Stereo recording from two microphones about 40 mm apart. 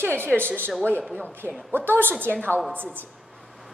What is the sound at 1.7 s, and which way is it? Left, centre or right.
Speech, right.